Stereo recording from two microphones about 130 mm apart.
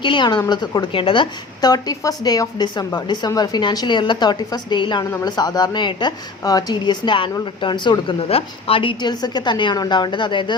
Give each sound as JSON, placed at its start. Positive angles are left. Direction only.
{"t": 0.0, "sound": "a woman's voice", "side_deg": 35}